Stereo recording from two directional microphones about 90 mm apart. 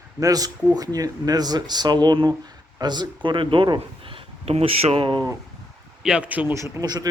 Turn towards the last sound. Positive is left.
turn(degrees=-50)  # may be behind; listen again after turning